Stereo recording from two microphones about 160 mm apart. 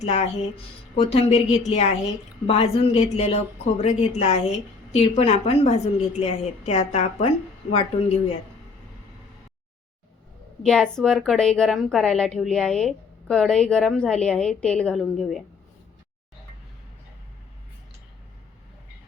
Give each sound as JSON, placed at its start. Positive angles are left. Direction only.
{"t": 0.0, "sound": "a woman's voice", "side_deg": 40}
{"t": 10.6, "sound": "a woman's voice", "side_deg": 5}